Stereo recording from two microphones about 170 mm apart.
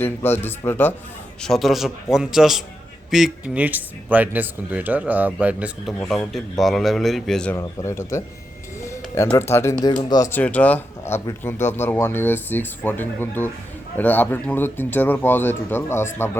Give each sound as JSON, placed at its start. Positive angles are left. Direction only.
{"t": 0.0, "sound": "speech", "side_deg": 15}
{"t": 1.4, "sound": "speech", "side_deg": 0}
{"t": 7.5, "sound": "speech", "side_deg": 15}
{"t": 8.8, "sound": "a sound", "side_deg": 15}
{"t": 9.4, "sound": "speech", "side_deg": 15}